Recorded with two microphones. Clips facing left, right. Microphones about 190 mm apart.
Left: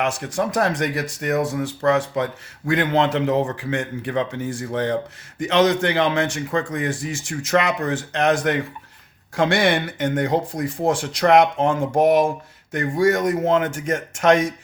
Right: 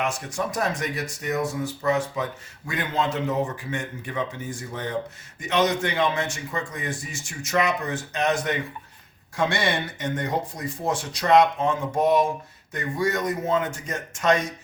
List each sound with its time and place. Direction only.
0.0 s speech: 85° left
3.6 s a man's voice: 90° left